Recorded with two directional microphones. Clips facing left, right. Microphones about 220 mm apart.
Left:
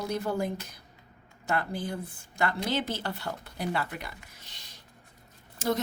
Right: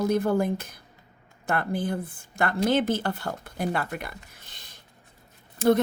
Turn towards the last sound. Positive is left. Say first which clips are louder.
# right 8 dB
turn(degrees=-55)  # may be behind; listen again after turning